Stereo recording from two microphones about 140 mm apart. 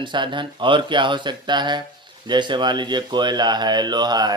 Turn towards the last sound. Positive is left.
turn(degrees=-30)  # may be behind; listen again after turning